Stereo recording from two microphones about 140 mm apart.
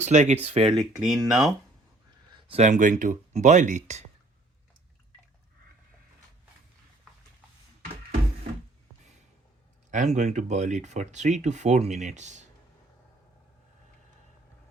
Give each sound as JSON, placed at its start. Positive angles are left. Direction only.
{"t": 0.0, "sound": "speech", "side_deg": -55}
{"t": 0.8, "sound": "speech", "side_deg": 0}
{"t": 2.5, "sound": "speech", "side_deg": -55}
{"t": 9.9, "sound": "speech", "side_deg": -60}